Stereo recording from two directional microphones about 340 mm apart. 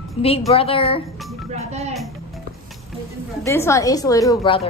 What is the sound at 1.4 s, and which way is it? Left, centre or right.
Speech, centre.